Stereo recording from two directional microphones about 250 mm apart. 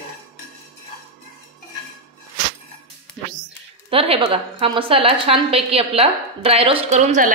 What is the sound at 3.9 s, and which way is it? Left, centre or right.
A woman's voice, right.